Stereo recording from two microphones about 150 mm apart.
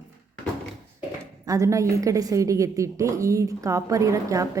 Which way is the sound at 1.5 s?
20° right (ahead or behind).